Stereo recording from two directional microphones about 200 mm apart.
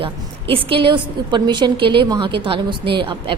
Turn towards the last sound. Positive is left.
turn(degrees=-25)  # may be behind; listen again after turning